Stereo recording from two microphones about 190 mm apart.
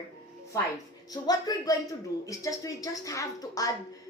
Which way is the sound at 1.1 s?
20° left (ahead or behind).